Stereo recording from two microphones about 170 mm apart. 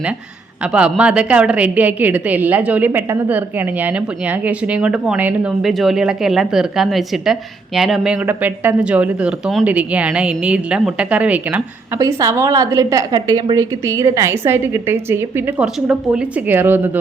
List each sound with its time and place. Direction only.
0.6 s a woman's voice: 5° right (ahead or behind)
11.9 s a woman's voice: 20° right (ahead or behind)